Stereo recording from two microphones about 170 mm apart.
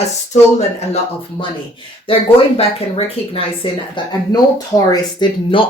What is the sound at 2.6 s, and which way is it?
Speech, 35° left (ahead or behind).